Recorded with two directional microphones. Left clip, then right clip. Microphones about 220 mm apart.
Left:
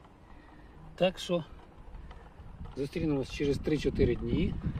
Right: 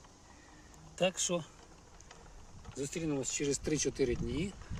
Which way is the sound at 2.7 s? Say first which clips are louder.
Left 4 dB; centre (ahead or behind).